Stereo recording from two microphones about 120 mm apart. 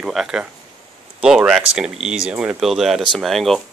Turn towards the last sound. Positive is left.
turn(degrees=0)  # may be behind; listen again after turning